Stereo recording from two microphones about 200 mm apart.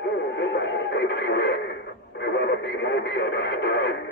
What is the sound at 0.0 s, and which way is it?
Radio, 60° left (ahead or behind).